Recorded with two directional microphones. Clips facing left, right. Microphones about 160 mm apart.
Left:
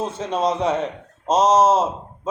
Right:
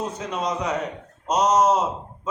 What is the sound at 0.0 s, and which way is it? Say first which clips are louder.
A man's voice: left 5 dB; 25° left (ahead or behind).